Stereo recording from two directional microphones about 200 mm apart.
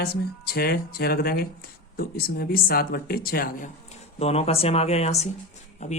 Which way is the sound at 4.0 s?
30° left (ahead or behind).